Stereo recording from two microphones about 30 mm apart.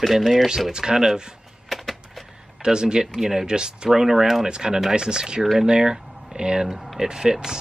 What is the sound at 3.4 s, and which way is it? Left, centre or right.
Speech, right.